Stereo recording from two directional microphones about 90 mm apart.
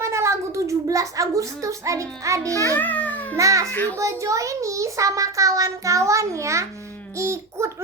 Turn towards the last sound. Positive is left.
turn(degrees=-30)  # may be behind; listen again after turning